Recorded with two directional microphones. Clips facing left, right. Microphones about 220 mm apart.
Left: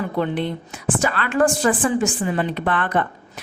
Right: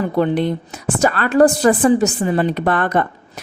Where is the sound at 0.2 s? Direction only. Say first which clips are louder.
Right 6 dB; 40° right (ahead or behind).